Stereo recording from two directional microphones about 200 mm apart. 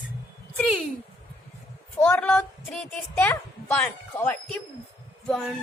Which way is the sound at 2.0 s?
5° left (ahead or behind).